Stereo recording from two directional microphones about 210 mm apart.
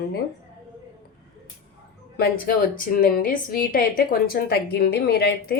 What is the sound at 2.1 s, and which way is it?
A woman's voice, 45° left (ahead or behind).